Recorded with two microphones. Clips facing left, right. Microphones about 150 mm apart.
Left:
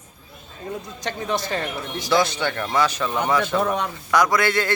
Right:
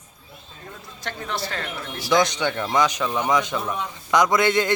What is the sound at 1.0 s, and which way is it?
Speech, 15° left (ahead or behind).